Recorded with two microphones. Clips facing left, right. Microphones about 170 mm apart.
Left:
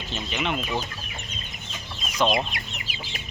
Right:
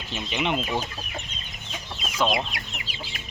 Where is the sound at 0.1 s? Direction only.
15° right (ahead or behind).